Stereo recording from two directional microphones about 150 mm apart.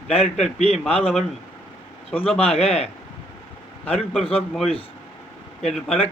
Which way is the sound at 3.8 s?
Centre (ahead or behind).